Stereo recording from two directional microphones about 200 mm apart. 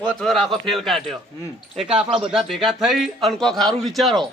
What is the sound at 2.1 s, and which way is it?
Speech, 30° right (ahead or behind).